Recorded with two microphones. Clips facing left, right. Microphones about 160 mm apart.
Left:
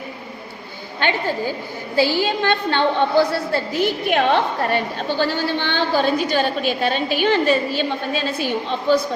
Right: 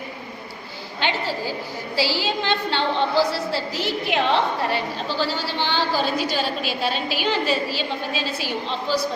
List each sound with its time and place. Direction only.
0.9 s a woman's voice: 50° left (ahead or behind)